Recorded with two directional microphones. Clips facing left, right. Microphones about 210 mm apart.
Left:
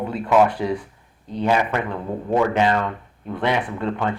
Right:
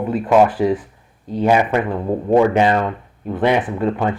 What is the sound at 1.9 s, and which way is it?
Speech, 30° right (ahead or behind).